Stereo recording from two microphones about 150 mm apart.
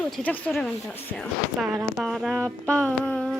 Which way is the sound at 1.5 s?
5° right (ahead or behind).